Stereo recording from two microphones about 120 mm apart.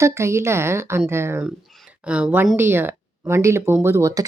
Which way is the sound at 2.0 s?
10° right (ahead or behind).